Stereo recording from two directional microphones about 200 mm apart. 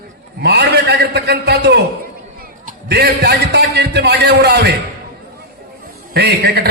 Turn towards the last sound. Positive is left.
turn(degrees=-55)  # may be behind; listen again after turning